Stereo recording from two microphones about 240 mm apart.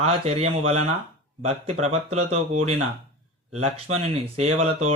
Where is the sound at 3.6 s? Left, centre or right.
Right.